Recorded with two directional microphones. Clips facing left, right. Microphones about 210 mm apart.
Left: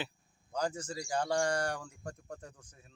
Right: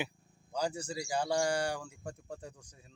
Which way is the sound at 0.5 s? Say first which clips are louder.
Even; 10° right (ahead or behind).